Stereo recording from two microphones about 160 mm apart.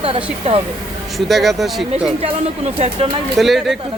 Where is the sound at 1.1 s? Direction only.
Centre (ahead or behind).